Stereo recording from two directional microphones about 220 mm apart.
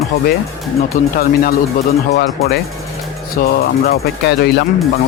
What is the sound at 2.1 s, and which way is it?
Speech, 45° left (ahead or behind).